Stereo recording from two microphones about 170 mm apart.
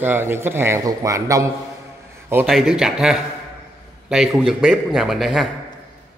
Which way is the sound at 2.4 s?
Centre (ahead or behind).